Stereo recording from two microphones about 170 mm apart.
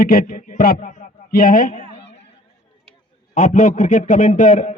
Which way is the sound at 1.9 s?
35° left (ahead or behind).